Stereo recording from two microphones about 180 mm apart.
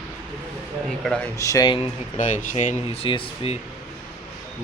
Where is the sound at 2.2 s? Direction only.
40° left (ahead or behind).